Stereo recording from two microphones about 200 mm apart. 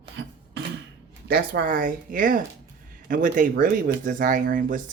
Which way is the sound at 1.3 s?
50° right (ahead or behind).